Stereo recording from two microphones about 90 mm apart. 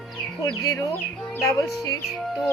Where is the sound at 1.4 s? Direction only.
35° left (ahead or behind).